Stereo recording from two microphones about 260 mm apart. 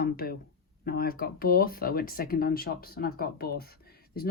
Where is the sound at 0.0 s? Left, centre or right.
Left.